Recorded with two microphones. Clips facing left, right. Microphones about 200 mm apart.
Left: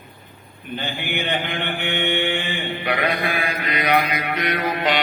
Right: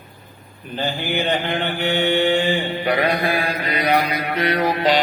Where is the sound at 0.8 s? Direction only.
35° right (ahead or behind).